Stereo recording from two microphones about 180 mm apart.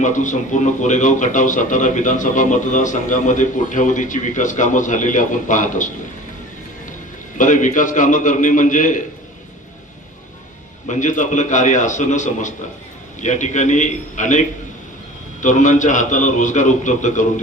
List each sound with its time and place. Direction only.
0.0 s speech: 45° left (ahead or behind)
7.3 s speech: 45° left (ahead or behind)
10.8 s speech: 40° left (ahead or behind)